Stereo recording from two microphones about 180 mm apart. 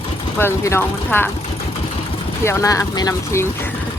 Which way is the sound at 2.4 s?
15° left (ahead or behind).